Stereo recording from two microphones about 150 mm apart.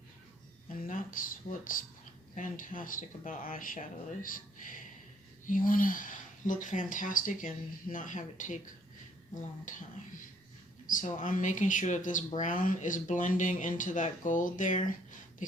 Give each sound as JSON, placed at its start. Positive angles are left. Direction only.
{"t": 0.9, "sound": "speech", "side_deg": 65}
{"t": 10.8, "sound": "speech", "side_deg": 60}